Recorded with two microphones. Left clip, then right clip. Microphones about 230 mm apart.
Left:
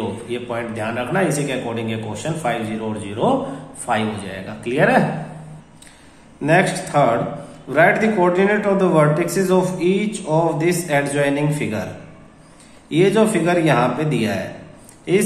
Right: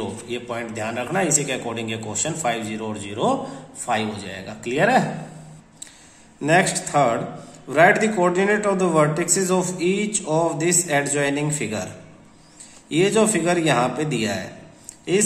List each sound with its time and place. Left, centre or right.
0.3 s speech: right
6.4 s speech: centre
12.9 s speech: centre